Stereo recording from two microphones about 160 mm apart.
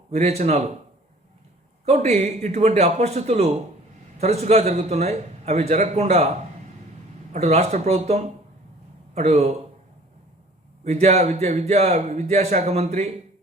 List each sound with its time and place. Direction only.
0.1 s a man's voice: 45° right (ahead or behind)
1.8 s a man's voice: 45° right (ahead or behind)
7.3 s a man's voice: 45° right (ahead or behind)
10.8 s a man's voice: 40° right (ahead or behind)